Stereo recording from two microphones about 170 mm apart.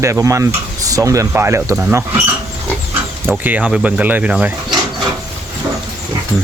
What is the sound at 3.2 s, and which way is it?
Speech, 10° right (ahead or behind).